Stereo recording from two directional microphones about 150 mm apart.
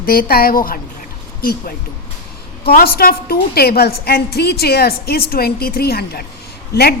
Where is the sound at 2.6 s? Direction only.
90° left.